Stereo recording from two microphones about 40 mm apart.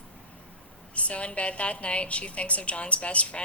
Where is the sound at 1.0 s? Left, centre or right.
Left.